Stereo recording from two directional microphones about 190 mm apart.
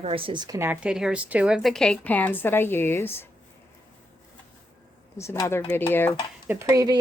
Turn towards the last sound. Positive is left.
turn(degrees=-15)  # may be behind; listen again after turning